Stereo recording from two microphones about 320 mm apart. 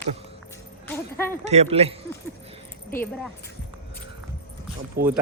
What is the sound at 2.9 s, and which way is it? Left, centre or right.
Speech, centre.